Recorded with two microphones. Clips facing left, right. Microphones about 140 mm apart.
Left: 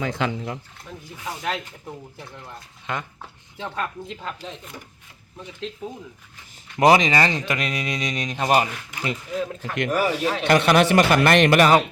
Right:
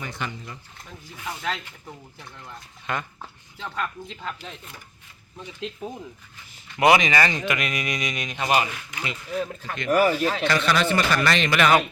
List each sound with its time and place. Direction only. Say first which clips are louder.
0.0 s speech: left 8 dB; 85° left
1.2 s speech: left 1 dB; 15° left (ahead or behind)
2.8 s speech: even; 20° left (ahead or behind)
6.7 s speech: left 2 dB; 35° left (ahead or behind)
9.7 s speech: right 2 dB; 75° left (ahead or behind)
10.4 s a man's voice: left 8 dB; 50° left (ahead or behind)
11.5 s speech: left 1 dB; 35° left (ahead or behind)